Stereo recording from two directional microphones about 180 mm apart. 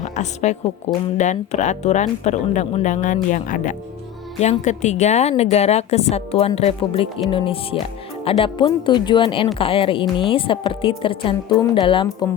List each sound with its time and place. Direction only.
0.0 s a woman's voice: 40° left (ahead or behind)